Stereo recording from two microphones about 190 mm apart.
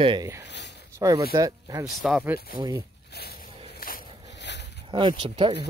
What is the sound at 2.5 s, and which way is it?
Speech, 25° right (ahead or behind).